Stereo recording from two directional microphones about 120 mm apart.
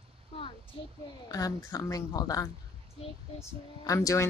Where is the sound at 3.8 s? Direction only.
30° left (ahead or behind).